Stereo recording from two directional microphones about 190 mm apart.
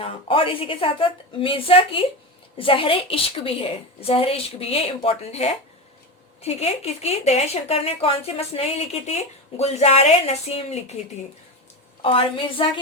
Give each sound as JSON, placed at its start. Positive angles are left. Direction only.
{"t": 0.0, "sound": "a woman's voice", "side_deg": 30}
{"t": 12.0, "sound": "a woman's voice", "side_deg": 25}